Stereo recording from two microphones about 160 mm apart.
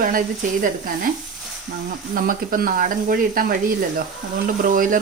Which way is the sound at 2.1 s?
65° right (ahead or behind).